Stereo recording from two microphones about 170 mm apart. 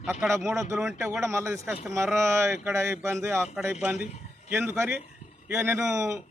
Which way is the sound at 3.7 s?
5° right (ahead or behind).